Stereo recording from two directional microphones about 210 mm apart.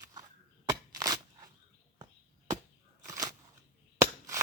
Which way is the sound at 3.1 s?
15° right (ahead or behind).